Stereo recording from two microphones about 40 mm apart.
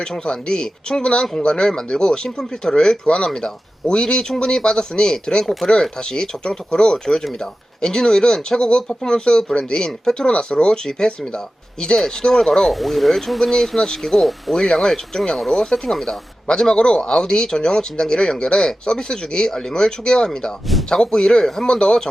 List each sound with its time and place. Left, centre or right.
0.3 s speech: left; by 14.5 s centre
14.5 s speech: centre